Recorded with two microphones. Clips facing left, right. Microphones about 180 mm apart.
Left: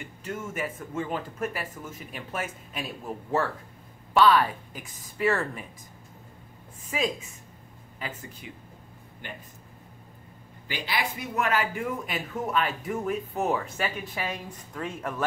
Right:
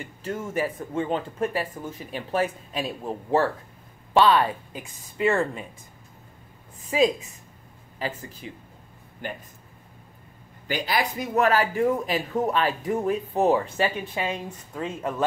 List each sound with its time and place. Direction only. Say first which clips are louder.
0.2 s speech: right 5 dB; 35° right (ahead or behind)
10.7 s speech: right 5 dB; 40° right (ahead or behind); by 15.2 s 20° right (ahead or behind)